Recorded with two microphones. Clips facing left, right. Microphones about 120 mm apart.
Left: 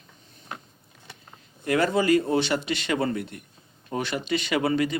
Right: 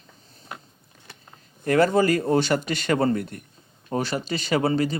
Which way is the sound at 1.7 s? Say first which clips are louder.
Right 2 dB; 40° right (ahead or behind).